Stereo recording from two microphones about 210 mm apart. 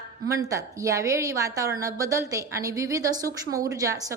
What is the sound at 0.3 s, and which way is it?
Speech, 15° right (ahead or behind).